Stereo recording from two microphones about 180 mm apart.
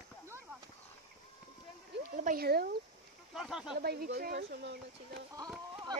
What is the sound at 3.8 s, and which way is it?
Speech, 60° right (ahead or behind).